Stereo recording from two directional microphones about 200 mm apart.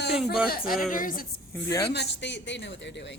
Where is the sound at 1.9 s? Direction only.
60° left (ahead or behind).